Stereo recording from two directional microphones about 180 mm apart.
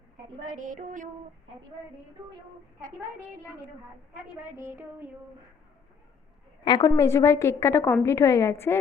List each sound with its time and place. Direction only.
0.4 s music: 45° right (ahead or behind)
4.5 s child singing: 15° right (ahead or behind)
6.7 s a woman's voice: 20° left (ahead or behind)